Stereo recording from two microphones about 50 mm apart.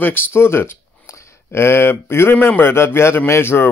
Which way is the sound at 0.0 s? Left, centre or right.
Left.